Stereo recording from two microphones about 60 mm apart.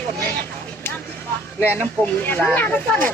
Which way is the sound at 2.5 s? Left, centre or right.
Left.